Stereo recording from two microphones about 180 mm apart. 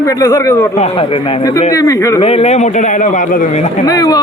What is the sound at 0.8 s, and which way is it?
Speech, 35° left (ahead or behind).